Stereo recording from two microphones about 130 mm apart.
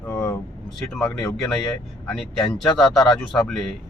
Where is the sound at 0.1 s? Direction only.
25° left (ahead or behind).